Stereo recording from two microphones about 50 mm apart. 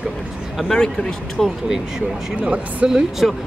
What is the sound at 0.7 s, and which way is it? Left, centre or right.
Speech, centre.